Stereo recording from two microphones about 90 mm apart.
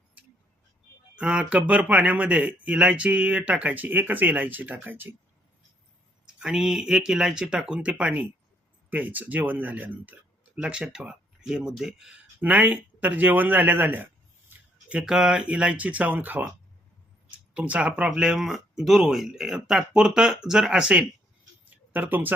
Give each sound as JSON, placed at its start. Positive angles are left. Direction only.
{"t": 1.1, "sound": "speech", "side_deg": -10}
{"t": 6.2, "sound": "speech", "side_deg": -5}
{"t": 12.4, "sound": "speech", "side_deg": -20}
{"t": 14.8, "sound": "speech", "side_deg": -10}
{"t": 21.6, "sound": "a sound", "side_deg": -20}